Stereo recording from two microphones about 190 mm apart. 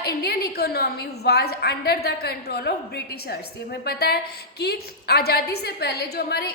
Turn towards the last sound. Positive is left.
turn(degrees=55)  # may be behind; listen again after turning